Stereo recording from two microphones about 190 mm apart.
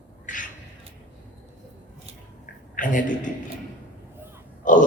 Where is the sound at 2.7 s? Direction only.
45° left (ahead or behind).